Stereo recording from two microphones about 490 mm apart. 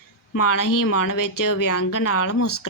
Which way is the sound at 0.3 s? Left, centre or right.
Left.